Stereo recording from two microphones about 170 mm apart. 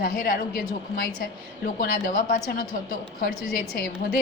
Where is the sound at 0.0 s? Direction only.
60° left (ahead or behind).